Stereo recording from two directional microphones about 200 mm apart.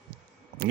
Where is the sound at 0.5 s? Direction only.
45° right (ahead or behind).